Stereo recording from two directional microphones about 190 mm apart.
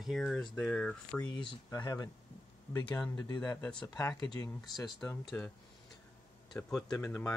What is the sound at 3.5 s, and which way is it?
Speech, 5° left (ahead or behind).